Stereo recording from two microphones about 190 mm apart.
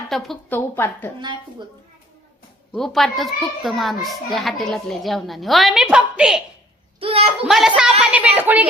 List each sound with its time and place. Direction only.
0.1 s a woman's voice: centre (ahead or behind)
0.8 s a woman's voice: 10° left (ahead or behind)
1.2 s a woman's voice: 25° right (ahead or behind)
2.7 s a child's voice: centre (ahead or behind)
7.0 s speech: 30° right (ahead or behind)
7.4 s a child's voice: centre (ahead or behind)